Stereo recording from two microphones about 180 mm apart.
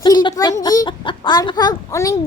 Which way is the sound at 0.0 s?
25° left (ahead or behind).